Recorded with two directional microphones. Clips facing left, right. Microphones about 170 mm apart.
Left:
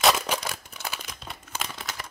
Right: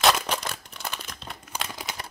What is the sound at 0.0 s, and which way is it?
Crumpling, 5° left (ahead or behind).